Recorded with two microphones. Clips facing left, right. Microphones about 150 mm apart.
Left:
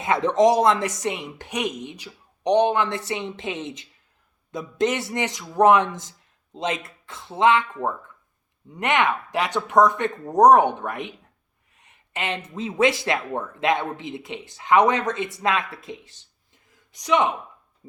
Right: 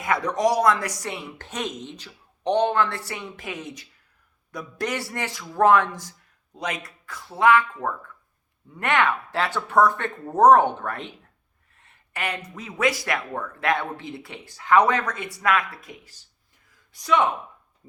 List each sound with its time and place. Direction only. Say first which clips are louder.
0.0 s speech: left 5 dB; 25° left (ahead or behind)